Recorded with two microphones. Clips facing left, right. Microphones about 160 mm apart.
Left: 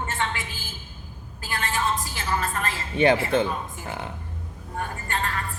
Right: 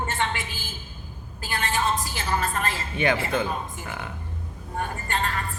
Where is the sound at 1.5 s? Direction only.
20° right (ahead or behind).